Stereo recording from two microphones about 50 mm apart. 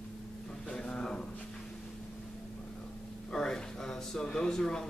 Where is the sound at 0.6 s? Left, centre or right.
Left.